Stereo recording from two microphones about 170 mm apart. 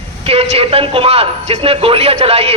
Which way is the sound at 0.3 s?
35° right (ahead or behind).